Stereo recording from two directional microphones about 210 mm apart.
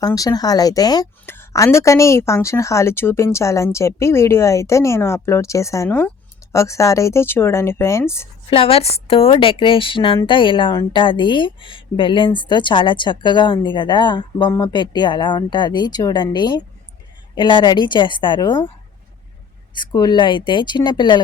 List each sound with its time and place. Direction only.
0.0 s a woman's voice: 15° left (ahead or behind)
8.4 s a woman's voice: 25° left (ahead or behind)
19.7 s a woman's voice: 20° left (ahead or behind)